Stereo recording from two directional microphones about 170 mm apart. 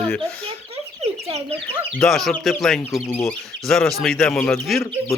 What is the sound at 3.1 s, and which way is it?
Speech, 15° left (ahead or behind).